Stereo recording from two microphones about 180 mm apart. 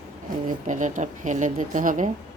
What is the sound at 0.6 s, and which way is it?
A woman's voice, 45° right (ahead or behind).